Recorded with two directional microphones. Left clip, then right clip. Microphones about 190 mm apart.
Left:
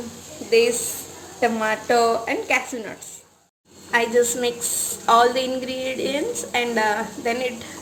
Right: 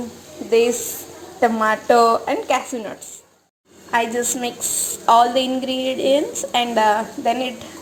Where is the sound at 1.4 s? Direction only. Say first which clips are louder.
Right 4 dB; 5° right (ahead or behind).